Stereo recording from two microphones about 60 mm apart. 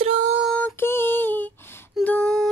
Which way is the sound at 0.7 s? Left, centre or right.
Left.